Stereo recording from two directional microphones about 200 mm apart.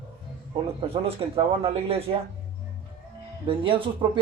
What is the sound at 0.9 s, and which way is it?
Speech, 30° right (ahead or behind).